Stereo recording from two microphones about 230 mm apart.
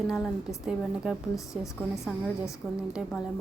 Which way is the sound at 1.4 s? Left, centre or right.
Centre.